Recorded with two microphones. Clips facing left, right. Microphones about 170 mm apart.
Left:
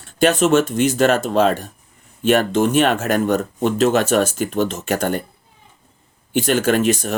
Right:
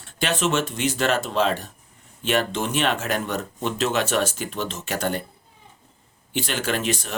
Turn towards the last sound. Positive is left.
turn(degrees=45)  # may be behind; listen again after turning